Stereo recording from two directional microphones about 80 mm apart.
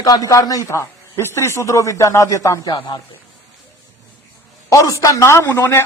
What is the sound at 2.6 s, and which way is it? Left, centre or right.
Speech, left.